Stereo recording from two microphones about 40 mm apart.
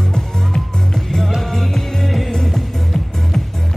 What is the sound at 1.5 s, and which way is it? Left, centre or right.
Music, centre.